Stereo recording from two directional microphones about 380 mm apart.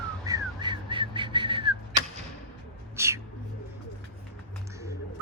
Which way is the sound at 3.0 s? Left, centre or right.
Centre.